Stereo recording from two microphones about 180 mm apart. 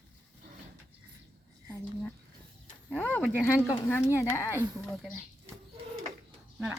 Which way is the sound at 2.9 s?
5° left (ahead or behind).